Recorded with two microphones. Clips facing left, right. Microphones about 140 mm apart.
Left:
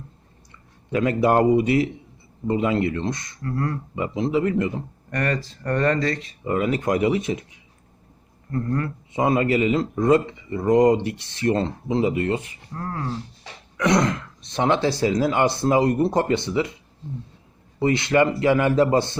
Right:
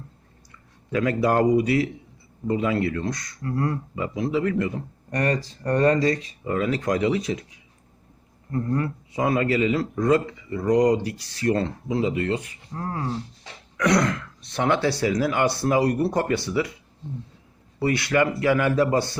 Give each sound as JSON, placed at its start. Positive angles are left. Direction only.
{"t": 0.9, "sound": "speech", "side_deg": 25}
{"t": 2.5, "sound": "speech", "side_deg": 25}
{"t": 3.4, "sound": "speech", "side_deg": -20}
{"t": 3.9, "sound": "speech", "side_deg": 25}
{"t": 5.1, "sound": "speech", "side_deg": -20}
{"t": 6.6, "sound": "speech", "side_deg": 25}
{"t": 8.4, "sound": "speech", "side_deg": -20}
{"t": 9.1, "sound": "speech", "side_deg": 25}
{"t": 12.7, "sound": "speech", "side_deg": -20}
{"t": 13.7, "sound": "speech", "side_deg": 25}
{"t": 17.7, "sound": "speech", "side_deg": 25}